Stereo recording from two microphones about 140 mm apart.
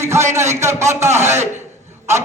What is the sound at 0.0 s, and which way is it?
A man's voice, 20° right (ahead or behind).